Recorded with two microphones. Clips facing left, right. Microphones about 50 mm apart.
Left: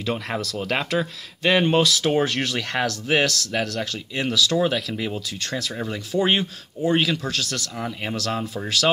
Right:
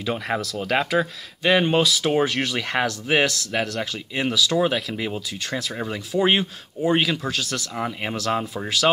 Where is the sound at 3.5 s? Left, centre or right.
Centre.